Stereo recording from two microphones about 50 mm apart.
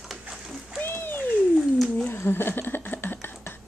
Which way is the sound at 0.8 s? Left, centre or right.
Left.